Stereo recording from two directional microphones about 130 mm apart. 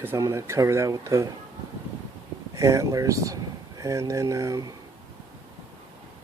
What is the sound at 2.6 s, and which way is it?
Speech, 25° right (ahead or behind).